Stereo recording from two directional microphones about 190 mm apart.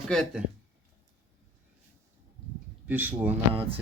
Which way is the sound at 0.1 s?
5° left (ahead or behind).